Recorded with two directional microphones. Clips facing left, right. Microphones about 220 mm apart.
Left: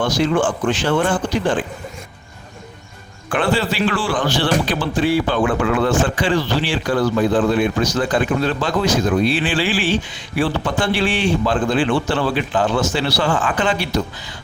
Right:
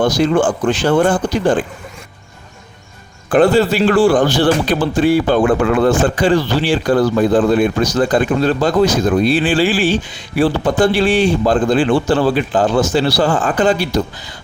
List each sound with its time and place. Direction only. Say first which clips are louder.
0.0 s a man's voice: right 4 dB; 40° right (ahead or behind)
3.2 s a man's voice: right 8 dB; 40° right (ahead or behind)